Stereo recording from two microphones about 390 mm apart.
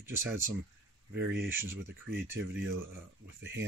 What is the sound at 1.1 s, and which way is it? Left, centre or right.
Speech, right.